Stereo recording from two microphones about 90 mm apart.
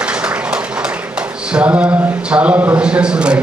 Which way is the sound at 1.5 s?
15° right (ahead or behind).